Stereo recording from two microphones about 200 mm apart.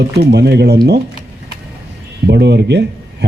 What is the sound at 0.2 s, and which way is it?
Speech, 55° right (ahead or behind).